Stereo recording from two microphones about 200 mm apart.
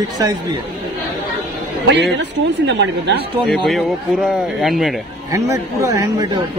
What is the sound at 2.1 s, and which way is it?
Speech, 65° right (ahead or behind).